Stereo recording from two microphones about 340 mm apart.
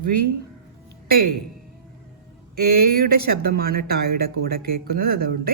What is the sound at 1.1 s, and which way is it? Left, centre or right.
Speech, right.